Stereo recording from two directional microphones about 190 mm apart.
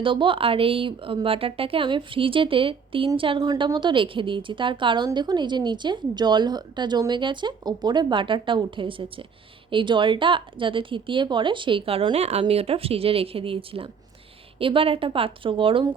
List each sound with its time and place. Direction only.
0.0 s a woman's voice: 25° right (ahead or behind)